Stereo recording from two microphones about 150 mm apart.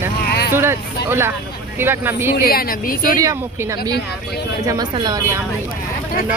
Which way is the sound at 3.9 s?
90° left.